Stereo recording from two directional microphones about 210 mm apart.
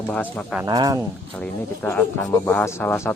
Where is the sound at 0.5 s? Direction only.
15° right (ahead or behind).